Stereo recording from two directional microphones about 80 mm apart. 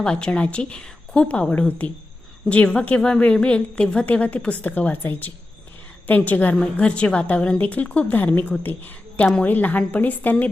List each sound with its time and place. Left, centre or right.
0.0 s a woman's voice: centre